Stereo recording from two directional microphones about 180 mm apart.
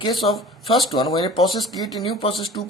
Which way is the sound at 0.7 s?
25° left (ahead or behind).